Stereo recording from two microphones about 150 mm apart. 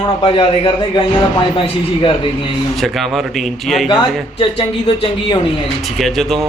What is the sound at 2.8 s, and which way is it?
A man's voice, centre (ahead or behind).